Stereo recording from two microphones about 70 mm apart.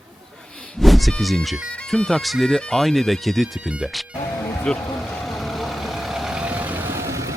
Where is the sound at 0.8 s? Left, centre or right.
Centre.